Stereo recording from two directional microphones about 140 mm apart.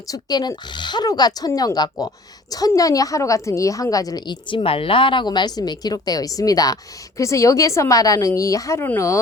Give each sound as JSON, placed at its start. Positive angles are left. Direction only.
{"t": 0.1, "sound": "speech", "side_deg": 30}